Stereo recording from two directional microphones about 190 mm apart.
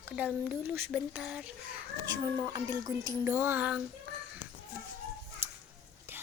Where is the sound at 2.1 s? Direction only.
20° right (ahead or behind).